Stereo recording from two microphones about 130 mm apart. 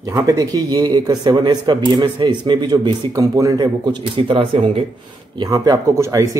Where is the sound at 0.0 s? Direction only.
25° right (ahead or behind).